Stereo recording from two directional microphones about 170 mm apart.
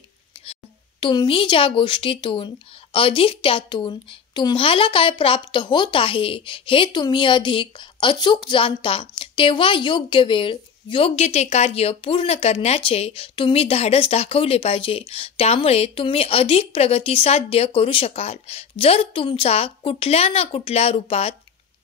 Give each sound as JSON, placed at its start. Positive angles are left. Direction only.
{"t": 1.0, "sound": "a woman's voice", "side_deg": 30}